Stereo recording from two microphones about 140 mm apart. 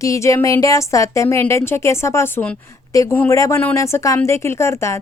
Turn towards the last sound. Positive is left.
turn(degrees=20)  # may be behind; listen again after turning